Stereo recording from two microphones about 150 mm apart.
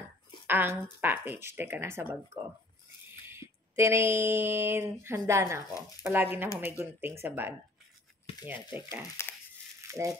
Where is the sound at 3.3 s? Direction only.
15° right (ahead or behind).